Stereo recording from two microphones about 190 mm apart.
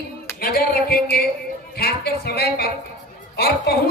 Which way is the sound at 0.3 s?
50° left (ahead or behind).